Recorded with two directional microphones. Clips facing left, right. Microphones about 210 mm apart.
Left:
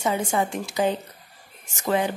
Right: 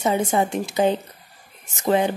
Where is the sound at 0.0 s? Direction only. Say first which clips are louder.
Right 3 dB; 20° right (ahead or behind).